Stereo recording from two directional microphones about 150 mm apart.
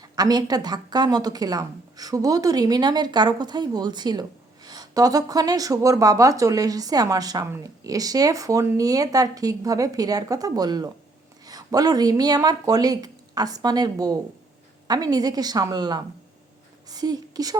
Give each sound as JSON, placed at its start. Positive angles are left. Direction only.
{"t": 0.0, "sound": "a woman's voice", "side_deg": -25}